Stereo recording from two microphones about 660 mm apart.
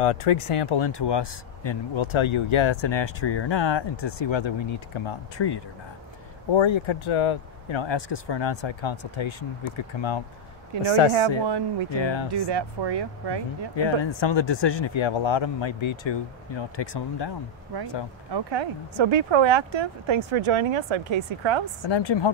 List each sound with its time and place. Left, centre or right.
0.0 s speech: left
10.7 s speech: right
11.9 s speech: left
12.3 s speech: right
13.7 s speech: left
18.3 s speech: right
21.8 s speech: left